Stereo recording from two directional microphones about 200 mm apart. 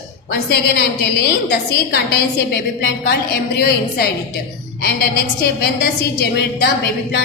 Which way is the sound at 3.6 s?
50° left (ahead or behind).